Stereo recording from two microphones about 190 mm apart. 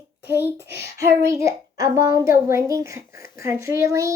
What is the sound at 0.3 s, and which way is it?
A child's voice, 10° right (ahead or behind).